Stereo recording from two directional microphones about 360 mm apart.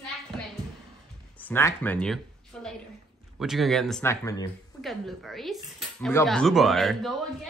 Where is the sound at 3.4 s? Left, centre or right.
Centre.